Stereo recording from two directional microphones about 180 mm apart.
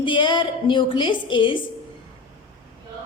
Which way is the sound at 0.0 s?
25° left (ahead or behind).